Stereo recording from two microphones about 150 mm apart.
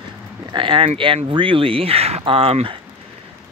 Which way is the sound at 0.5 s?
35° right (ahead or behind).